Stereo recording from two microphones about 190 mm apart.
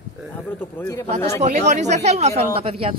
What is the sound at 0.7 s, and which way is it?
Speech, 15° left (ahead or behind).